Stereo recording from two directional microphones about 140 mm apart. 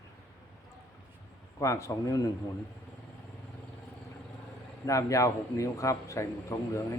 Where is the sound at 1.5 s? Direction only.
25° left (ahead or behind).